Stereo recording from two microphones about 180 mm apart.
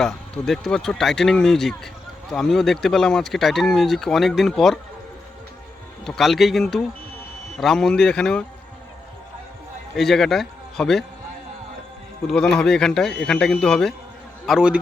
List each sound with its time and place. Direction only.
0.0 s speech: centre (ahead or behind)
6.1 s speech: centre (ahead or behind)
9.9 s speech: centre (ahead or behind)
12.3 s speech: 5° left (ahead or behind)